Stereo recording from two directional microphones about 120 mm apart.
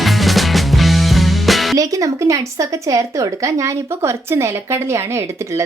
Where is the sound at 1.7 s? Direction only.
30° right (ahead or behind).